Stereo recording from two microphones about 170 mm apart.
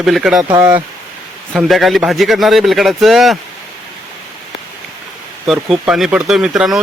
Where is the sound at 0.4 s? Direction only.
20° right (ahead or behind).